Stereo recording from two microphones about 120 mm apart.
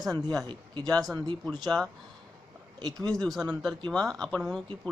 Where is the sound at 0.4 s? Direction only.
40° right (ahead or behind).